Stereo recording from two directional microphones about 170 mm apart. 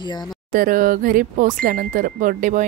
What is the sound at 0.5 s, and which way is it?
Speech, 55° right (ahead or behind).